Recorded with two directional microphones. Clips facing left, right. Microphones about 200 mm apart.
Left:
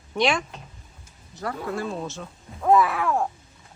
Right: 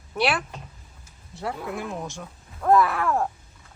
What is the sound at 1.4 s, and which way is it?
Speech, 20° right (ahead or behind).